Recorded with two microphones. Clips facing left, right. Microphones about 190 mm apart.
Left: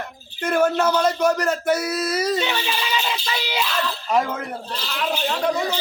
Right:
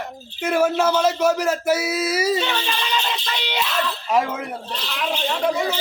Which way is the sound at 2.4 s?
10° left (ahead or behind).